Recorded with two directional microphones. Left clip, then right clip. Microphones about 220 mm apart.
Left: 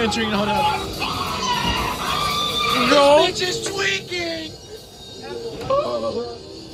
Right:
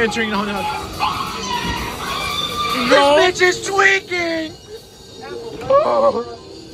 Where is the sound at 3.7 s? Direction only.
5° right (ahead or behind).